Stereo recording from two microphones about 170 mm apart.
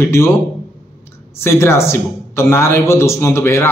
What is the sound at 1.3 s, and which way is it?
A man's voice, 15° left (ahead or behind).